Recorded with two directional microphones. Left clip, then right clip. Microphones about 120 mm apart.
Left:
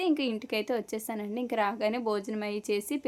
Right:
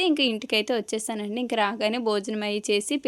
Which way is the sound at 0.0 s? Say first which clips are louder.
Right 6 dB; 30° right (ahead or behind).